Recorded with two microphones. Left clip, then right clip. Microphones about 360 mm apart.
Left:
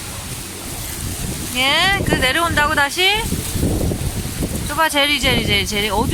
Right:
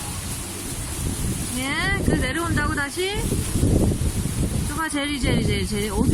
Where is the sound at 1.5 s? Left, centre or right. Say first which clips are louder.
Left 10 dB; centre.